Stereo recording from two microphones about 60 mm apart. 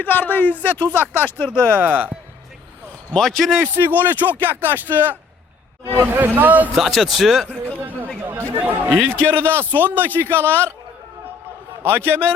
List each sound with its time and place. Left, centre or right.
0.0 s a man's voice: left
1.8 s speech: right
3.2 s a man's voice: centre
3.6 s speech: right
6.7 s a man's voice: centre
7.4 s a sound: right
8.2 s chatter: right
8.6 s speech: right
9.0 s a man's voice: centre
9.4 s speech: right
10.4 s a man's voice: left
11.8 s speech: right